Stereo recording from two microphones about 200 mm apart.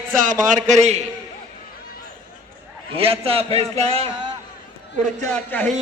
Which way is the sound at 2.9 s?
30° right (ahead or behind).